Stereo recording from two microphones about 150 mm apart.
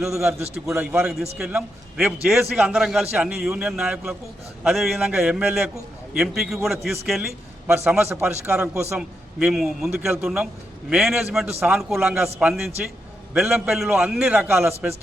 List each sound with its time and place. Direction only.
0.5 s a man's voice: 10° right (ahead or behind)